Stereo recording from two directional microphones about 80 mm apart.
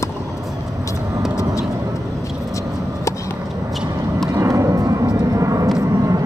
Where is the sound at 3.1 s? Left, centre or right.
Left.